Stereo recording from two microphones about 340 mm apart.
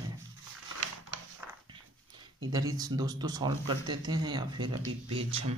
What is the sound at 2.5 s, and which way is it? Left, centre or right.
Speech, centre.